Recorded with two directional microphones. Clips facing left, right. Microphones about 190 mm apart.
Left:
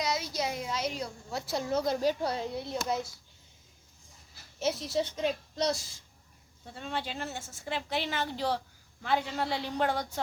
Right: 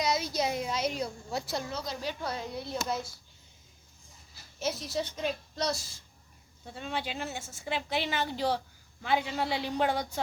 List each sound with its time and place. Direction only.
0.0 s a sound: 20° right (ahead or behind)
1.7 s a child's voice: 50° left (ahead or behind); by 3.1 s 15° left (ahead or behind)
4.6 s a woman's voice: 25° left (ahead or behind)
6.7 s a man's voice: 10° right (ahead or behind)